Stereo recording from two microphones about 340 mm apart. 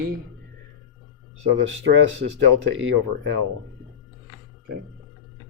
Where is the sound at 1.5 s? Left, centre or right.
Right.